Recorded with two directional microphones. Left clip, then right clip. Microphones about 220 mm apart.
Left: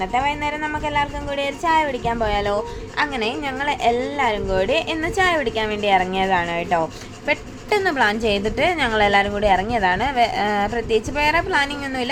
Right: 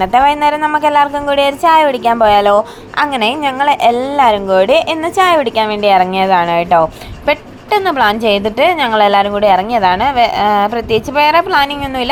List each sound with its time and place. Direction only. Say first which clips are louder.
0.0 s a woman's voice: right 12 dB; 30° right (ahead or behind)